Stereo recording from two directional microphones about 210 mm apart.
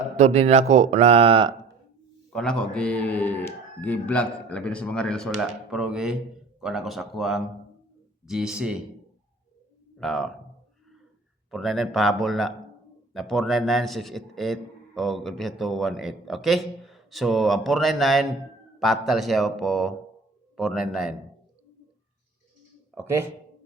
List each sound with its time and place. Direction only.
0.2 s speech: 30° right (ahead or behind)
2.3 s a man's voice: 5° left (ahead or behind)
10.0 s a man's voice: centre (ahead or behind)
11.5 s a man's voice: centre (ahead or behind)
23.0 s speech: 10° right (ahead or behind)